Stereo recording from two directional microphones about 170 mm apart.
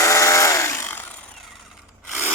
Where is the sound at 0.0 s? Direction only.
15° left (ahead or behind).